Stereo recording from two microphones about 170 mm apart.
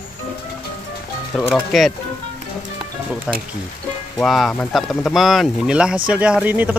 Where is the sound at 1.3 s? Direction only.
Centre (ahead or behind).